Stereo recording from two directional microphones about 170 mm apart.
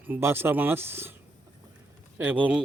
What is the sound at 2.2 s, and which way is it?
Speech, 10° right (ahead or behind).